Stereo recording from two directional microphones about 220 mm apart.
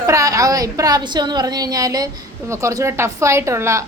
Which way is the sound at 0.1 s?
15° right (ahead or behind).